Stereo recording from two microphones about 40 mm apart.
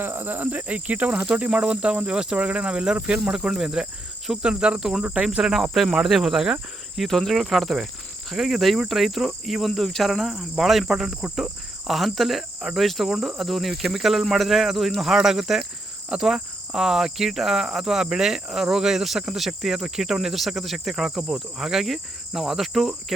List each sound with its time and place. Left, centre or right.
0.0 s speech: right
3.5 s cricket: centre
4.4 s speech: right
4.8 s cricket: centre
5.0 s cricket: right
6.1 s cricket: centre
6.9 s speech: centre
10.6 s cricket: centre
11.9 s speech: centre
16.0 s cricket: centre
20.9 s cricket: centre
22.4 s speech: centre